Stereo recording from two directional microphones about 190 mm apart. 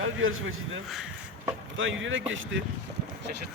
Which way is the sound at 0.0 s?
90° right.